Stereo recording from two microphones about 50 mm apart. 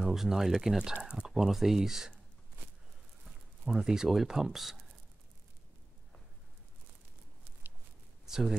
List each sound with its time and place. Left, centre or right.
0.0 s speech: centre
1.0 s a sound: centre
1.3 s speech: centre
3.6 s speech: centre
8.3 s speech: centre